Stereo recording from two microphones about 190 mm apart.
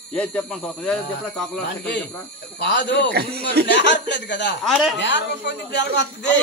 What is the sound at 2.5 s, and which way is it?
Speech, 60° left (ahead or behind).